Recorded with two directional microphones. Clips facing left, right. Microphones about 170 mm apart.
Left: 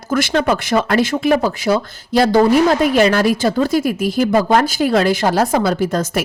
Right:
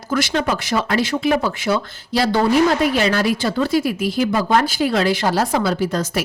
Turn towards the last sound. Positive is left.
turn(degrees=50)  # may be behind; listen again after turning